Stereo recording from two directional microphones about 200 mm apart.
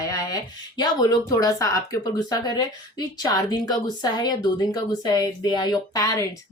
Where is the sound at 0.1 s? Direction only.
15° left (ahead or behind).